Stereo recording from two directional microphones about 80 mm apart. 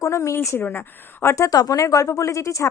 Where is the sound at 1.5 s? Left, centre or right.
Left.